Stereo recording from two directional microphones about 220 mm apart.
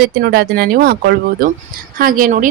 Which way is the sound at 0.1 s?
45° right (ahead or behind).